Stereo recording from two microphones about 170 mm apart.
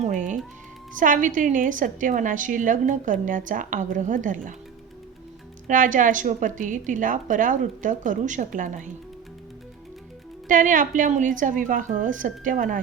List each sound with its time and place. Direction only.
0.0 s music: 50° right (ahead or behind)
0.9 s a woman's voice: 50° right (ahead or behind)
5.6 s a woman's voice: 50° right (ahead or behind)
10.5 s a woman's voice: 50° right (ahead or behind)